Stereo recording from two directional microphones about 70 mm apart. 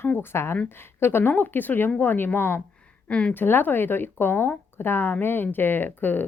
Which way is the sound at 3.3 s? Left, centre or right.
Left.